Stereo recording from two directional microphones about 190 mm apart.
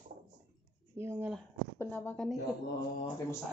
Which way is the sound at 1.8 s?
10° left (ahead or behind).